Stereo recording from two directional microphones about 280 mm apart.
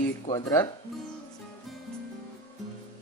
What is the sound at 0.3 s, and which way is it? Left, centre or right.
Speech, centre.